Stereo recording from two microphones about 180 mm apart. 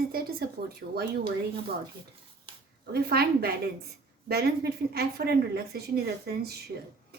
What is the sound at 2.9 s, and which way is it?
A woman's voice, 60° right (ahead or behind).